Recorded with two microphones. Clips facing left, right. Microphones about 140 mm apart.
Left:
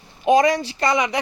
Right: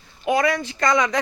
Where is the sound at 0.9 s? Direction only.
15° left (ahead or behind).